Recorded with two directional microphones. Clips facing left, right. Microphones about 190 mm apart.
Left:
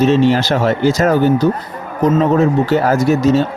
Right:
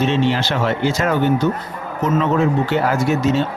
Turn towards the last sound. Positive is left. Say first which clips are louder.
# left 5 dB
turn(degrees=40)  # may be behind; listen again after turning